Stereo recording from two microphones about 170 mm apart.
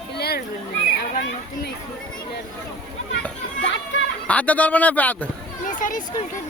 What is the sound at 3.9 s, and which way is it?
Chatter, 90° left.